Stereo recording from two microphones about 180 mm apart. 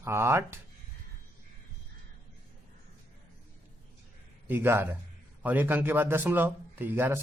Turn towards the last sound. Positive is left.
turn(degrees=-10)  # may be behind; listen again after turning